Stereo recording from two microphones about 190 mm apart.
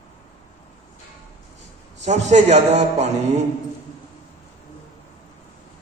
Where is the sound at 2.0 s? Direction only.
35° right (ahead or behind).